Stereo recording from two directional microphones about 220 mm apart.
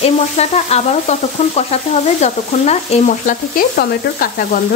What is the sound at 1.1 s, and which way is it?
Stir, 30° left (ahead or behind).